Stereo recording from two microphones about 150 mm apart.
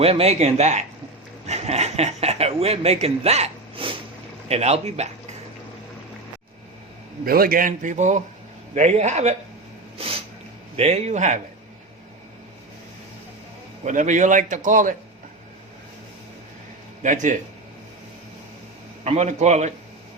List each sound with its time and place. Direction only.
0.0 s speech: 40° right (ahead or behind)
7.3 s a man's voice: 80° right; by 9.3 s 50° right (ahead or behind)
10.0 s a sound: 40° right (ahead or behind)
10.8 s speech: 45° right (ahead or behind)
13.8 s a man's voice: 55° right (ahead or behind)
17.0 s a man's voice: 55° right (ahead or behind)
19.0 s speech: 50° right (ahead or behind)